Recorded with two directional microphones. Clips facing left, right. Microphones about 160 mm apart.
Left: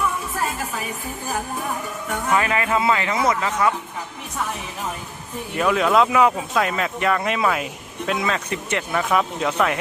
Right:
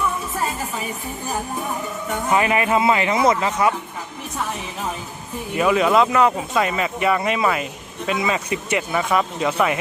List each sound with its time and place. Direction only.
2.3 s a man's voice: 20° right (ahead or behind)
5.5 s speech: 5° right (ahead or behind)